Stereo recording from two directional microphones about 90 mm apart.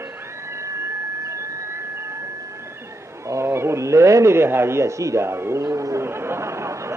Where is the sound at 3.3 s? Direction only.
30° right (ahead or behind).